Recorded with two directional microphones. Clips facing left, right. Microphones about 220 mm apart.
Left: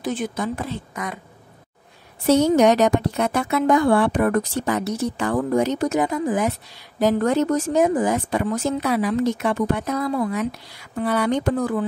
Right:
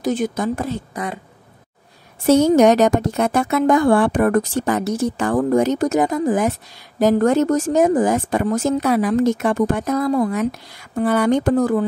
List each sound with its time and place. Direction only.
0.0 s a woman's voice: 40° right (ahead or behind)
2.2 s speech: 45° right (ahead or behind)